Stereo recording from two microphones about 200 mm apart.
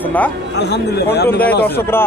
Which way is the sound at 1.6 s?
10° left (ahead or behind).